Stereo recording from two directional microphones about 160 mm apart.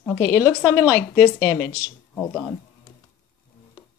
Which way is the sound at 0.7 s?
20° left (ahead or behind).